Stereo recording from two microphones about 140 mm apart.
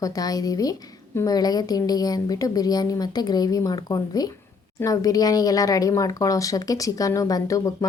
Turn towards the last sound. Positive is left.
turn(degrees=25)  # may be behind; listen again after turning